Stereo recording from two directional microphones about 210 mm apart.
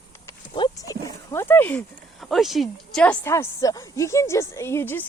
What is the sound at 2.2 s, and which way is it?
A woman's voice, centre (ahead or behind).